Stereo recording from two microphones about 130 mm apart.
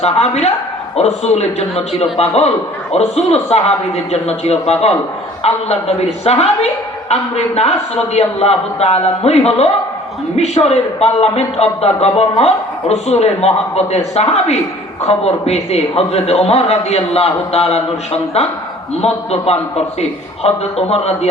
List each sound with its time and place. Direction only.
0.0 s a man's voice: 55° left (ahead or behind)